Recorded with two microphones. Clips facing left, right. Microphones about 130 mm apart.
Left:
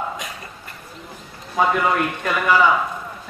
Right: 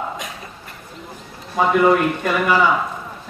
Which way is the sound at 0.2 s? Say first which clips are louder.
Right 1 dB; centre (ahead or behind).